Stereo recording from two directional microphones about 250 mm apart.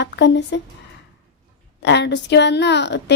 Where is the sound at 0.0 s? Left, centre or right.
Left.